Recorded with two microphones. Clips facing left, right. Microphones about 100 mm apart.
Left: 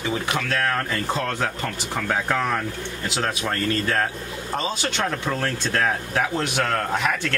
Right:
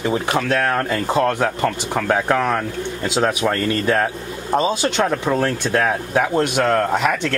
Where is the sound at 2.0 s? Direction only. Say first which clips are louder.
Right 5 dB; 20° right (ahead or behind).